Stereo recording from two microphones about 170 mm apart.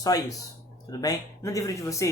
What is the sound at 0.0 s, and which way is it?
Speech, 20° left (ahead or behind).